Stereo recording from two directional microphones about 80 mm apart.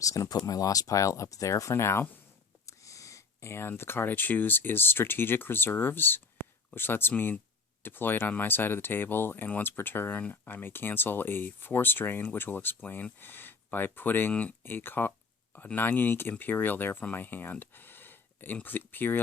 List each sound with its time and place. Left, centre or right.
0.0 s speech: left